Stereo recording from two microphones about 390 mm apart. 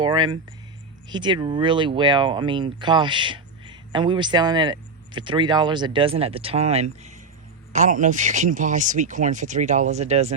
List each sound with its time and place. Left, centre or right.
0.0 s speech: centre